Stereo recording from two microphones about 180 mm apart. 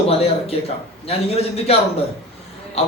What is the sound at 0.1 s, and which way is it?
Speech, 35° left (ahead or behind).